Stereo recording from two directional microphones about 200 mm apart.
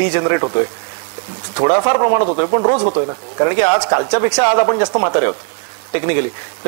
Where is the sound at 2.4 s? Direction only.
25° left (ahead or behind).